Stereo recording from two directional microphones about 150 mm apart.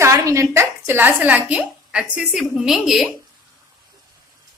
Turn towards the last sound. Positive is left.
turn(degrees=0)  # may be behind; listen again after turning